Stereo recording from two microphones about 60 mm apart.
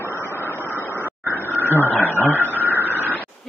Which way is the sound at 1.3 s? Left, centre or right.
Right.